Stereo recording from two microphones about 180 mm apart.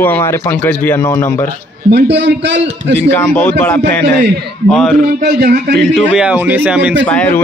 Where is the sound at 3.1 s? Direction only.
10° left (ahead or behind).